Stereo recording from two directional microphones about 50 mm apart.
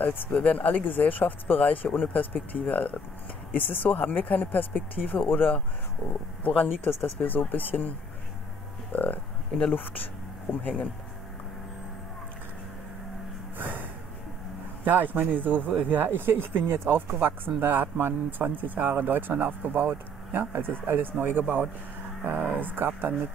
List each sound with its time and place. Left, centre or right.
0.0 s speech: left
8.9 s speech: left
13.6 s music: right
14.9 s speech: right